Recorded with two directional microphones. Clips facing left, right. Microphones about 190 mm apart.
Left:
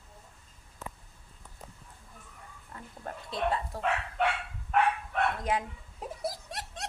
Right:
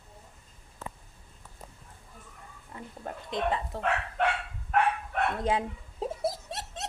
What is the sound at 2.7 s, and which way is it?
Speech, 15° right (ahead or behind).